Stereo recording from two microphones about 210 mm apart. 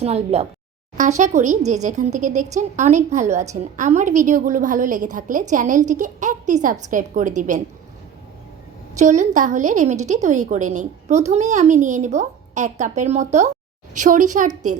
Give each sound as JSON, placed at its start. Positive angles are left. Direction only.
{"t": 0.0, "sound": "a woman's voice", "side_deg": -30}
{"t": 9.0, "sound": "a woman's voice", "side_deg": -35}